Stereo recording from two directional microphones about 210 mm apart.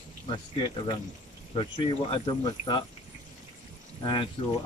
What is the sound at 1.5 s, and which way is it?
Speech, 25° left (ahead or behind).